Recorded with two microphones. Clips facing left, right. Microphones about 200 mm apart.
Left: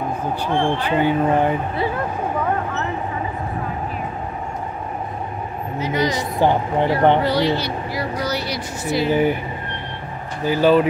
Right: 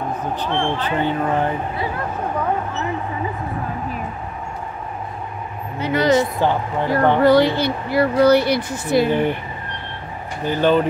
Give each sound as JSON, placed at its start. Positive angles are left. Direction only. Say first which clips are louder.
{"t": 0.5, "sound": "speech", "louder": "left 3 dB", "side_deg": 10}
{"t": 5.8, "sound": "speech", "louder": "right 1 dB", "side_deg": -60}
{"t": 6.4, "sound": "speech", "louder": "left 2 dB", "side_deg": 15}
{"t": 7.2, "sound": "speech", "louder": "right 5 dB", "side_deg": -50}
{"t": 9.1, "sound": "speech", "louder": "left 1 dB", "side_deg": 5}
{"t": 10.4, "sound": "speech", "louder": "left 2 dB", "side_deg": 5}